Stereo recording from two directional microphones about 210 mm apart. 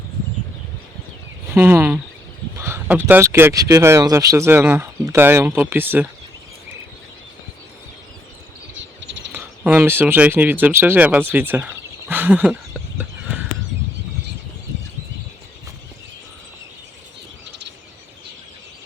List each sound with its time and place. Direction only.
1.5 s speech: 10° right (ahead or behind)
8.7 s a sound: 60° right (ahead or behind)
9.3 s speech: 10° right (ahead or behind)